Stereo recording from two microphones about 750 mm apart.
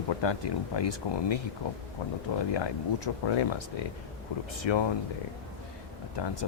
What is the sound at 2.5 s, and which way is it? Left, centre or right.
Speech, left.